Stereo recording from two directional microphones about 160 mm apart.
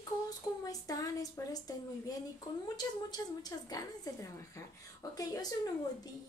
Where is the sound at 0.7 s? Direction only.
20° left (ahead or behind).